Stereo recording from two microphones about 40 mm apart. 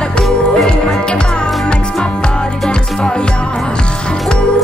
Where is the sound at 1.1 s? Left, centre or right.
Left.